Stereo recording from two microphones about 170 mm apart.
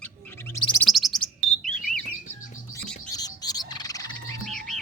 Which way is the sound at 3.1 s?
20° left (ahead or behind).